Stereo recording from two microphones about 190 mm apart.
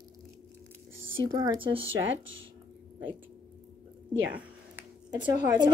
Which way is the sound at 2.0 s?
90° right.